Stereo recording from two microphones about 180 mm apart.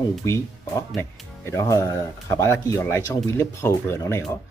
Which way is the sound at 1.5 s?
20° left (ahead or behind).